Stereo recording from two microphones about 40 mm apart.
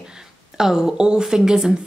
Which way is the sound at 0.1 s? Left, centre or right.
Centre.